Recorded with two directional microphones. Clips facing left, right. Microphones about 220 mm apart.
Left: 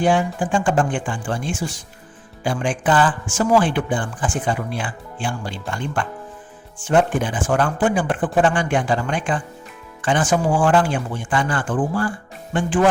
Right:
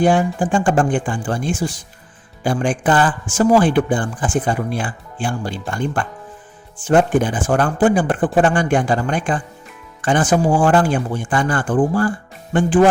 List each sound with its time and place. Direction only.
0.0 s speech: 45° right (ahead or behind)